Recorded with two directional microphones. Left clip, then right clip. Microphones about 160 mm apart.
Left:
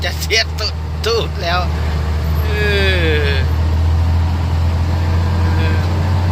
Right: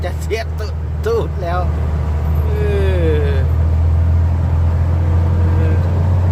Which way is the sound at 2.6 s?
15° right (ahead or behind).